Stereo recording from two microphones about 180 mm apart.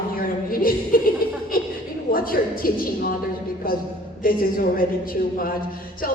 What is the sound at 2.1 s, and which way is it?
Speech, 55° left (ahead or behind).